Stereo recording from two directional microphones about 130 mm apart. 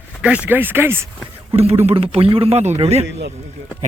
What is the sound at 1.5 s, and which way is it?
Speech, 50° right (ahead or behind).